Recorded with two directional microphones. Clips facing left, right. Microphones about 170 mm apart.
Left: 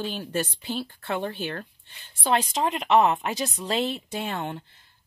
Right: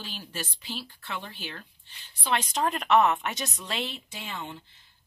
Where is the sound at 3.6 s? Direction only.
40° left (ahead or behind).